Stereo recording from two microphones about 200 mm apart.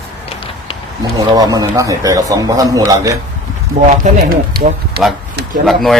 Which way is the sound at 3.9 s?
45° right (ahead or behind).